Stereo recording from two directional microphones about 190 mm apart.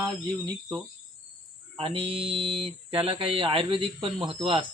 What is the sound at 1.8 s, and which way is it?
Speech, 30° right (ahead or behind).